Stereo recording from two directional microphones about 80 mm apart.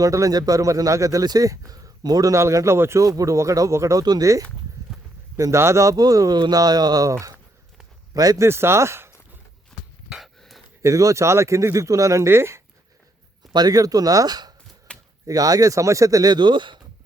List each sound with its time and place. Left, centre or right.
0.0 s speech: right
2.3 s speech: right
4.0 s speech: right
8.4 s speech: right
10.8 s speech: right
13.5 s speech: right
14.9 s chop: centre
15.3 s speech: right
16.3 s speech: right